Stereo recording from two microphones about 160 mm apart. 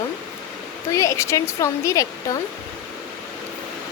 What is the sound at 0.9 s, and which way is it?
Speech, 20° left (ahead or behind).